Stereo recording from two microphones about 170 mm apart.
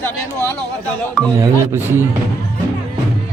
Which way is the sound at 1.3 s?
20° right (ahead or behind).